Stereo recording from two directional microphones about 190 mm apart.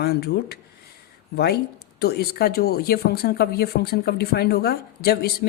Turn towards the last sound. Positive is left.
turn(degrees=55)  # may be behind; listen again after turning